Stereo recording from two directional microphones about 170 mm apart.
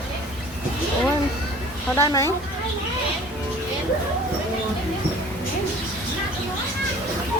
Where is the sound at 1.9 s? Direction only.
15° left (ahead or behind).